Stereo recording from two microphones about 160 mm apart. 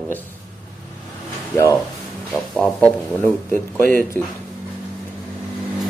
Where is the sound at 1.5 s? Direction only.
15° left (ahead or behind).